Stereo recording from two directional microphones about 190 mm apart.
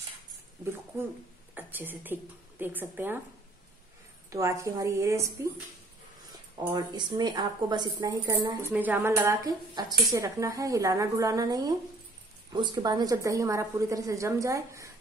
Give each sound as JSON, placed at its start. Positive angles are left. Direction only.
{"t": 0.9, "sound": "speech", "side_deg": -15}
{"t": 4.3, "sound": "speech", "side_deg": -15}
{"t": 6.7, "sound": "a woman's voice", "side_deg": -25}